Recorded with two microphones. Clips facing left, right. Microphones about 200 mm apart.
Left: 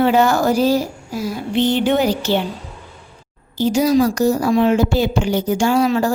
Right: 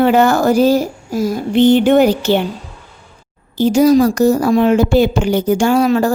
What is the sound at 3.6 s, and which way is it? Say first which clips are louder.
Speech: right 5 dB; 55° right (ahead or behind).